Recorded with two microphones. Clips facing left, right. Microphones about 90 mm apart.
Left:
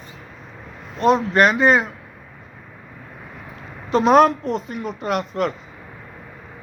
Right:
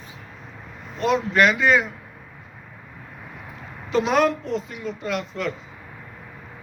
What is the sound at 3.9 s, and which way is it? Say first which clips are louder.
Speech: left 6 dB; 45° left (ahead or behind).